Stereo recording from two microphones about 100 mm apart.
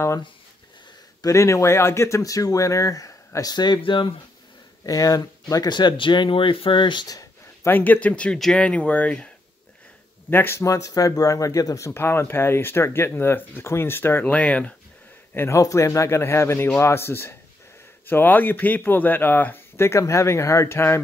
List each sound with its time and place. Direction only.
1.2 s speech: 30° left (ahead or behind); by 4.1 s 55° left (ahead or behind)
4.8 s speech: 35° left (ahead or behind)
7.2 s speech: 20° left (ahead or behind)
10.3 s speech: 25° left (ahead or behind)
15.3 s speech: 30° left (ahead or behind)